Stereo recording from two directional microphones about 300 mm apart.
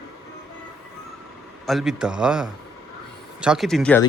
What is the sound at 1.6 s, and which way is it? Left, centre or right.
Speech, centre.